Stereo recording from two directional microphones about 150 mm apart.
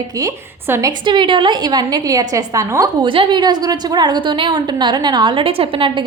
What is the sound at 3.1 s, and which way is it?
A woman's voice, 35° right (ahead or behind).